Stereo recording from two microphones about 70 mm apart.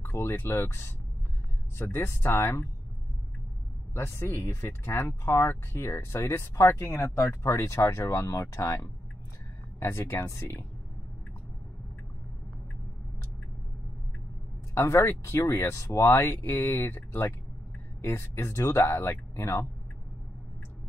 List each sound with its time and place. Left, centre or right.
0.0 s speech: left
3.9 s speech: left
9.8 s speech: left
14.9 s speech: left